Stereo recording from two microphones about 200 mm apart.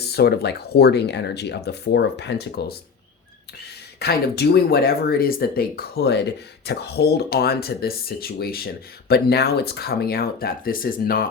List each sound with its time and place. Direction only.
0.0 s speech: 55° left (ahead or behind)
4.0 s speech: 50° left (ahead or behind)